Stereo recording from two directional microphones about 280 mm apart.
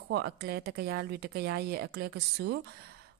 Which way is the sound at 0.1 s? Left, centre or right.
Right.